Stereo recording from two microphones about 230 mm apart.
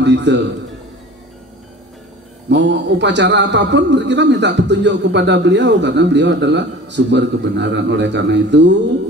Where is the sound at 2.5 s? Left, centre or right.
Right.